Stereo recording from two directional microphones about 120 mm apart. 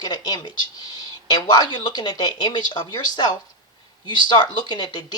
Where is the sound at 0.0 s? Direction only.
35° left (ahead or behind).